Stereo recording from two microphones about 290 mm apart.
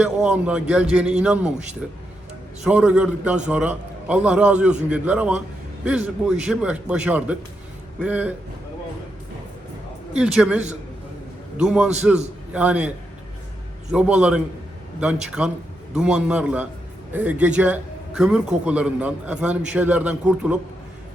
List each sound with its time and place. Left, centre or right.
0.0 s a man's voice: centre
10.2 s a man's voice: centre
13.9 s a man's voice: centre